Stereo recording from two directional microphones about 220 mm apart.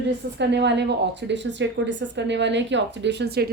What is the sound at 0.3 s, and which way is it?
A woman's voice, 50° right (ahead or behind).